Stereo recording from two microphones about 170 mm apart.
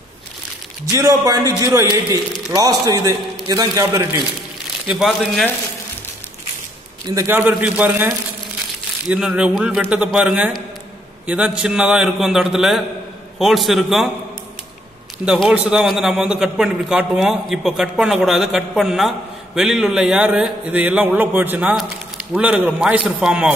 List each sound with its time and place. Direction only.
0.9 s a man's voice: 20° right (ahead or behind)
4.8 s a man's voice: centre (ahead or behind)
7.2 s a man's voice: 10° right (ahead or behind)
15.2 s a man's voice: centre (ahead or behind)